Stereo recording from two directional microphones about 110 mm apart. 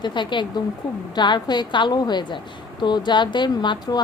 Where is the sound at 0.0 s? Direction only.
45° left (ahead or behind).